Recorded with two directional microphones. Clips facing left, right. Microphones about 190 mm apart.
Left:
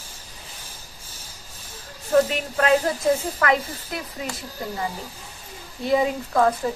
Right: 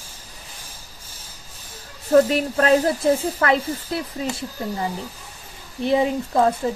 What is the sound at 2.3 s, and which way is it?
A woman's voice, 40° right (ahead or behind).